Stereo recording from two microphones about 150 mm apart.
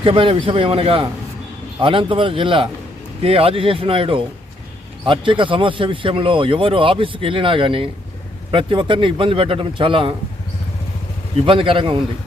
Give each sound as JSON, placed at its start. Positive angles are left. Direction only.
{"t": 0.0, "sound": "speech", "side_deg": -35}
{"t": 11.3, "sound": "speech", "side_deg": -35}